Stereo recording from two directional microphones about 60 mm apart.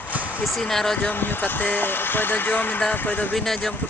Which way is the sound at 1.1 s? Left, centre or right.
Left.